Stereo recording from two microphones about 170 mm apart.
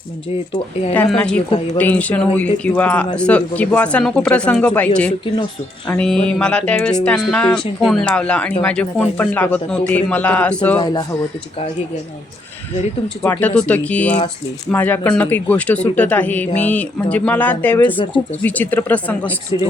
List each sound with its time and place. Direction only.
0.5 s speech: 40° left (ahead or behind)
0.9 s a man's voice: 5° left (ahead or behind)
1.5 s speech: 35° left (ahead or behind)
1.8 s a man's voice: 10° left (ahead or behind)
5.9 s a sound: 5° left (ahead or behind)
6.4 s a man's voice: 5° left (ahead or behind)
10.8 s speech: 25° left (ahead or behind)
13.2 s a man's voice: 10° left (ahead or behind)
17.9 s speech: 30° left (ahead or behind)
18.4 s a man's voice: 10° left (ahead or behind)